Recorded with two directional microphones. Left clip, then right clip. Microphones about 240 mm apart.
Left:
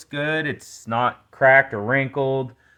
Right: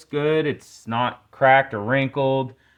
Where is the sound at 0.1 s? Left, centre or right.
Left.